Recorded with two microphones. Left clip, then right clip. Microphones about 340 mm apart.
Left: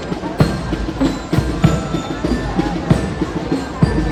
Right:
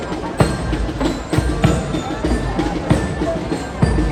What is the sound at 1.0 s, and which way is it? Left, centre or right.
Music, right.